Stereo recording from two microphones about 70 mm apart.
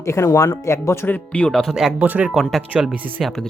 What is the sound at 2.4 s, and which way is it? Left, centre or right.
Speech, centre.